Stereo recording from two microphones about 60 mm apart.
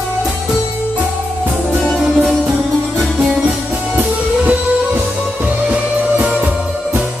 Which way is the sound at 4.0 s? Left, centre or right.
Right.